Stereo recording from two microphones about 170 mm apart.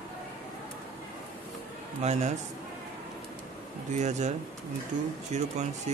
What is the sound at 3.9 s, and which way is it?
Speech, 45° right (ahead or behind).